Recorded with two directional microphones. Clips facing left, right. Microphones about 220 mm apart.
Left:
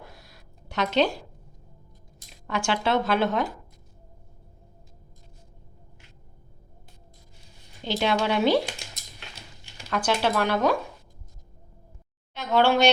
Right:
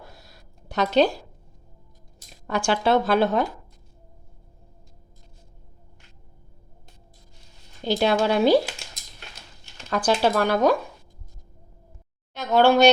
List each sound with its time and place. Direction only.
0.7 s speech: 35° right (ahead or behind)
2.5 s speech: 40° right (ahead or behind)
7.9 s speech: 40° right (ahead or behind)
9.9 s speech: 40° right (ahead or behind)
12.3 s a sound: 40° right (ahead or behind)